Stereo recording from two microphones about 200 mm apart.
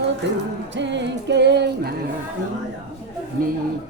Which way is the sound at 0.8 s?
60° right (ahead or behind).